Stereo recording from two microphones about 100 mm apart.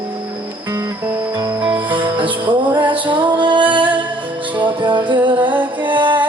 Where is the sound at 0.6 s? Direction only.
25° right (ahead or behind).